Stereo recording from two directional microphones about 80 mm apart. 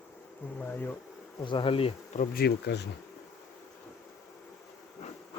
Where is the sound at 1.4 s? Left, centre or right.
Left.